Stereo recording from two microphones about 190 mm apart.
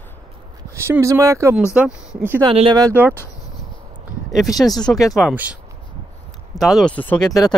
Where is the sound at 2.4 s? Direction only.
25° right (ahead or behind).